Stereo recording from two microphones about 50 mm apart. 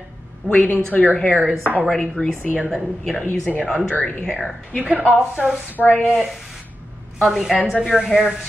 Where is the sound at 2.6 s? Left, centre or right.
Centre.